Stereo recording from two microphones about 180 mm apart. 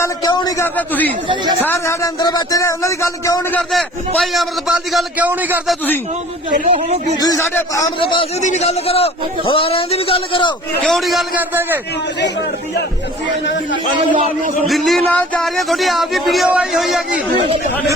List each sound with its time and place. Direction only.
0.0 s a sound: 20° left (ahead or behind)
0.6 s speech: 10° left (ahead or behind)
3.7 s speech: centre (ahead or behind)
7.2 s a man's voice: 20° left (ahead or behind)
7.9 s a man's voice: 30° left (ahead or behind)
10.8 s speech: centre (ahead or behind)
14.1 s a man's voice: 45° right (ahead or behind)
14.7 s speech: centre (ahead or behind)